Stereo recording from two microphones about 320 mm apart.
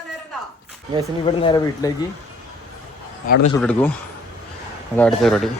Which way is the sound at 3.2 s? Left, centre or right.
Left.